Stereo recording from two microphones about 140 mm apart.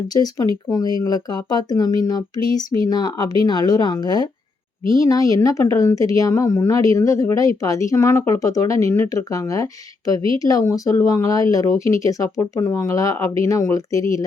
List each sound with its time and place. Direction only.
0.1 s a woman's voice: 30° left (ahead or behind)